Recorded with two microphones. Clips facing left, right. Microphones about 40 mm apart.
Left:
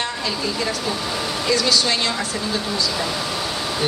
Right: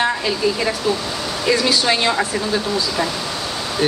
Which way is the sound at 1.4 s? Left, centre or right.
Right.